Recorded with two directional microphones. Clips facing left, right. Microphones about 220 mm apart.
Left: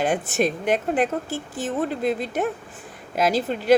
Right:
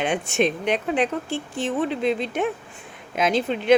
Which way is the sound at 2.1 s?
45° left (ahead or behind).